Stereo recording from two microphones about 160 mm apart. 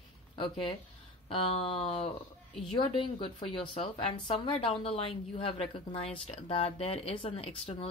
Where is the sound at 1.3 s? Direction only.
35° left (ahead or behind).